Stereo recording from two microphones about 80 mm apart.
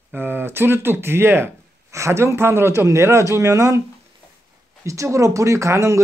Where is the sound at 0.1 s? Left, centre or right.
Right.